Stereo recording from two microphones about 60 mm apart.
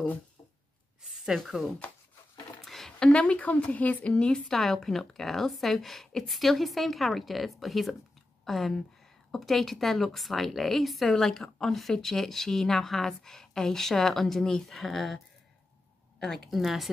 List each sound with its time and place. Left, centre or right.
1.2 s speech: centre
2.6 s a sound: centre
3.1 s a woman's voice: centre
4.5 s speech: centre
16.2 s speech: centre